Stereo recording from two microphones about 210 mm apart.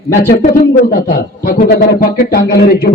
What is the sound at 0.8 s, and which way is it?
A man's voice, 45° left (ahead or behind).